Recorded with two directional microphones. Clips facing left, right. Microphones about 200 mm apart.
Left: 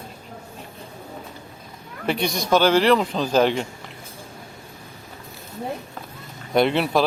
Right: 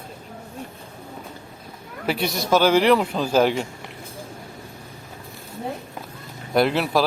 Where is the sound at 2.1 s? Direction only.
5° right (ahead or behind).